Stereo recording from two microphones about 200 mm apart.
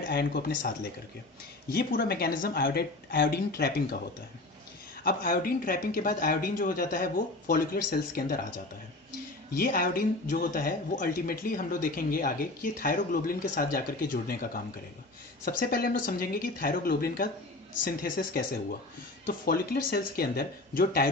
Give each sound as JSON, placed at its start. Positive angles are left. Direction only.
{"t": 0.1, "sound": "speech", "side_deg": 50}
{"t": 5.0, "sound": "speech", "side_deg": 45}
{"t": 9.6, "sound": "speech", "side_deg": 45}